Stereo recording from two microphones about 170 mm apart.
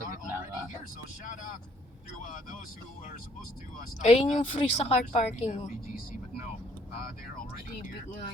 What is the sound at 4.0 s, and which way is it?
Speech, 45° left (ahead or behind).